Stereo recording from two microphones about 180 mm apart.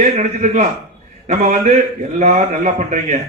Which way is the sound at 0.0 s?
40° right (ahead or behind).